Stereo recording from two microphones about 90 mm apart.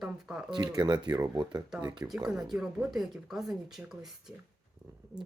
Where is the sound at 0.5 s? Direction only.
55° right (ahead or behind).